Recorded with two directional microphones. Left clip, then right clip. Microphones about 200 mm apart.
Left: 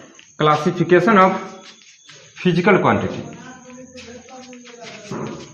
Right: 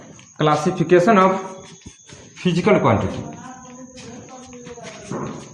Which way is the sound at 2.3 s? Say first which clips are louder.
Left 2 dB; 25° left (ahead or behind).